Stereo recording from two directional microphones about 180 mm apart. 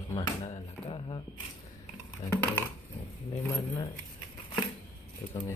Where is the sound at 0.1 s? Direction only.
35° left (ahead or behind).